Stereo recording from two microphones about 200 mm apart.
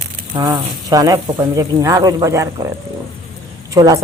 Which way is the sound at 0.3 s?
20° right (ahead or behind).